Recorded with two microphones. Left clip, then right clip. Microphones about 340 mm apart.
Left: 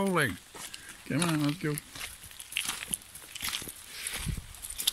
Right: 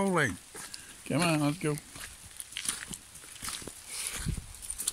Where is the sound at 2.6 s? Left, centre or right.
Centre.